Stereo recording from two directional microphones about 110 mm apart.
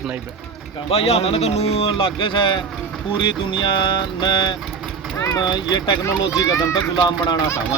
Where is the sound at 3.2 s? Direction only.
50° left (ahead or behind).